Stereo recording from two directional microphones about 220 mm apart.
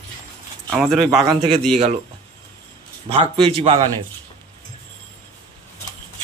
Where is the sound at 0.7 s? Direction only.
Centre (ahead or behind).